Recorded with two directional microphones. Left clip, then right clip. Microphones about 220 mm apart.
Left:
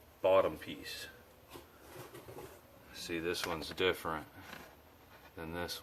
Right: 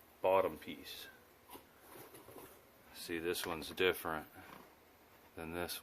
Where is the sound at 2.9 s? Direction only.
45° right (ahead or behind).